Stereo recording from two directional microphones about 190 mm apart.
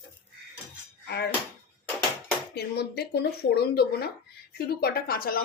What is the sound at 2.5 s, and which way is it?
A woman's voice, 60° left (ahead or behind).